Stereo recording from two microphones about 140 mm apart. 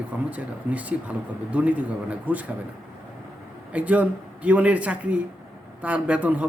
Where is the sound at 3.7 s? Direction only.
10° right (ahead or behind).